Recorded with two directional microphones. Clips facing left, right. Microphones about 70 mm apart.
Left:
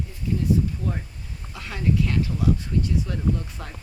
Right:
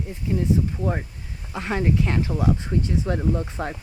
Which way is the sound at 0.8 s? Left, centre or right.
Right.